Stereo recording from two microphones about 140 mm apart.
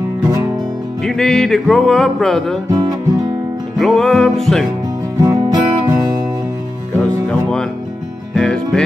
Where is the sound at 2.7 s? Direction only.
25° right (ahead or behind).